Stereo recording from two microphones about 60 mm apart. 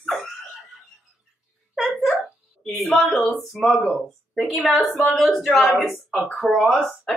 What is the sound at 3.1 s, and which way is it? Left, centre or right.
Speech, centre.